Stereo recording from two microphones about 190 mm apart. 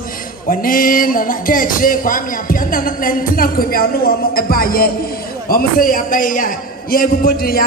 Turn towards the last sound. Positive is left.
turn(degrees=50)  # may be behind; listen again after turning